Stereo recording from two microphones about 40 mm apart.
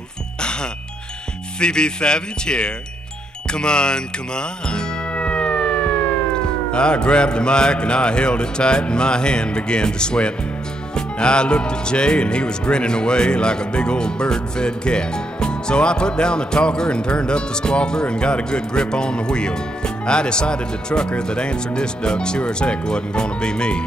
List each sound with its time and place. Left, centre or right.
1.6 s speech: left
3.5 s music: left
6.7 s speech: left